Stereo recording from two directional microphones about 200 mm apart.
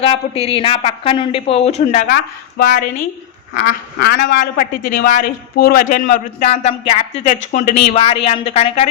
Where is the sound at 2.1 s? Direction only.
50° left (ahead or behind).